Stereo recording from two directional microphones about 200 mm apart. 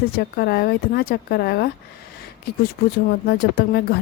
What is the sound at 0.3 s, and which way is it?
Speech, 50° left (ahead or behind).